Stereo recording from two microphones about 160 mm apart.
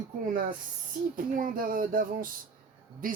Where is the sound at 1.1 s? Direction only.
60° right (ahead or behind).